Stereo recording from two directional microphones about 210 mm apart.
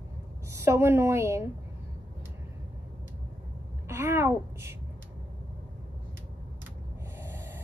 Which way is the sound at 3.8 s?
10° right (ahead or behind).